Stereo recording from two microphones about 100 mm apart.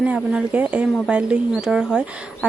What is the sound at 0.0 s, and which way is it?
Speech, 10° right (ahead or behind).